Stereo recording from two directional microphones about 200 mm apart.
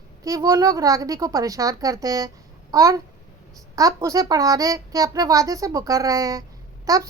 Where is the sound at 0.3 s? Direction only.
15° right (ahead or behind).